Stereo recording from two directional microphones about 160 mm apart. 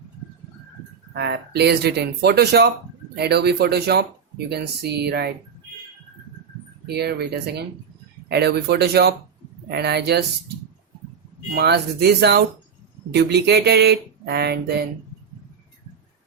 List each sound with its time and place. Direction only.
1.1 s speech: 90° right
6.8 s speech: 90° right
11.5 s speech: 85° right